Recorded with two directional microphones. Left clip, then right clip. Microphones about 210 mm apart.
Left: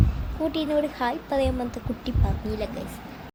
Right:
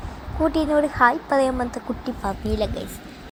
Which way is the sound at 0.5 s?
10° right (ahead or behind).